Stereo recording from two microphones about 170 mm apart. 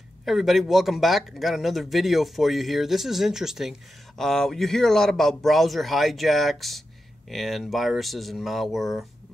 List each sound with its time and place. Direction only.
0.2 s speech: centre (ahead or behind)